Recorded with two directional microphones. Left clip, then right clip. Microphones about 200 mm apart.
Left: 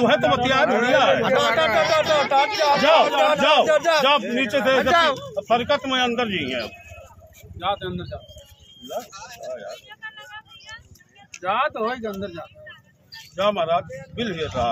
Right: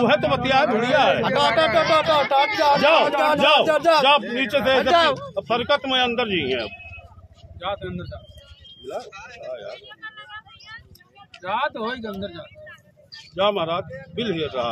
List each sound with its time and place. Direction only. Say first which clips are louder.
0.0 s speech: left 1 dB; 50° right (ahead or behind)
7.5 s speech: left 3 dB; 25° left (ahead or behind)
9.8 s vehicle: even; 20° left (ahead or behind)
11.4 s speech: left 2 dB; 20° left (ahead or behind)
13.1 s a man's voice: right 1 dB; 55° right (ahead or behind)